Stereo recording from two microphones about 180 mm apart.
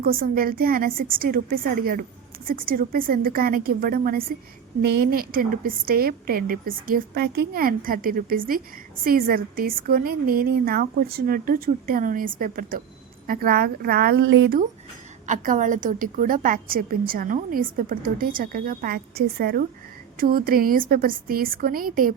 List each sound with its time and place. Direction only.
0.0 s a woman's voice: 55° right (ahead or behind)
15.3 s a woman's voice: 45° right (ahead or behind)